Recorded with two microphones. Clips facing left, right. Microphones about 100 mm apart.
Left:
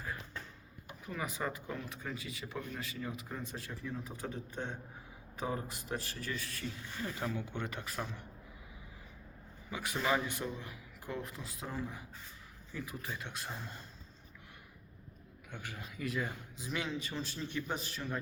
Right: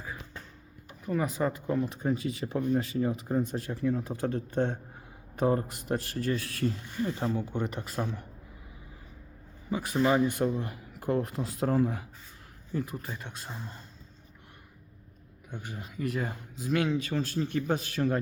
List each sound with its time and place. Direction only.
1.0 s speech: 45° right (ahead or behind)
1.8 s speech: 25° right (ahead or behind)
2.3 s speech: 50° right (ahead or behind)
3.0 s speech: 35° right (ahead or behind)
3.5 s speech: 50° right (ahead or behind); by 4.8 s 70° right (ahead or behind)
5.4 s speech: 55° right (ahead or behind)
6.4 s speech: 65° right (ahead or behind)
6.8 s speech: 25° right (ahead or behind)
7.4 s speech: 40° right (ahead or behind)
9.6 s speech: 35° right (ahead or behind); by 12.0 s 65° right (ahead or behind)
12.7 s speech: 50° right (ahead or behind)
15.5 s speech: 20° right (ahead or behind)
16.0 s speech: 40° right (ahead or behind); by 18.2 s 60° right (ahead or behind)